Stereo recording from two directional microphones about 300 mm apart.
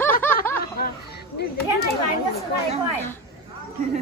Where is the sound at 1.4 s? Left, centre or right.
Left.